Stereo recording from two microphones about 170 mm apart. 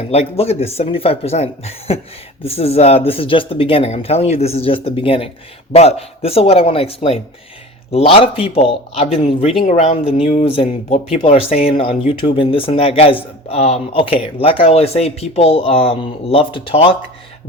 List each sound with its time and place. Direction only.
0.1 s speech: 35° left (ahead or behind)